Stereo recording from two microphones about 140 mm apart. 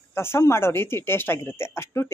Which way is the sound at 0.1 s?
15° left (ahead or behind).